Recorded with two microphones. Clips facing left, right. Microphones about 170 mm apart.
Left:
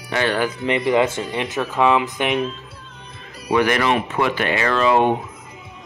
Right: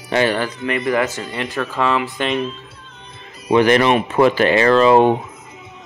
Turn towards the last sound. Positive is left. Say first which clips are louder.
# right 6 dB
turn(degrees=-35)  # may be behind; listen again after turning